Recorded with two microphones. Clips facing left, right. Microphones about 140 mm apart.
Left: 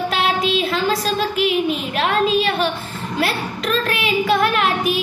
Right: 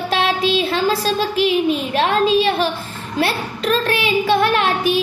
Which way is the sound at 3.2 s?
35° right (ahead or behind).